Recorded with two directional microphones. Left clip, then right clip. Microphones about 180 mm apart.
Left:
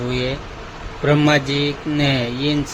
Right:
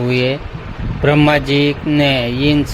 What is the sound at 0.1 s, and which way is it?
Speech, 30° right (ahead or behind).